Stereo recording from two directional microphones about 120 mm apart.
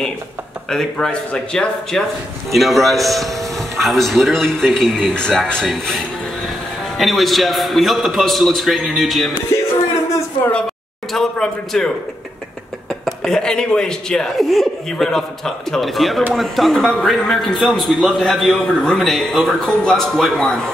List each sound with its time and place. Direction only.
0.7 s a man's voice: 5° left (ahead or behind)
9.5 s music: 25° left (ahead or behind)
11.1 s speech: centre (ahead or behind)
13.0 s speech: 5° left (ahead or behind)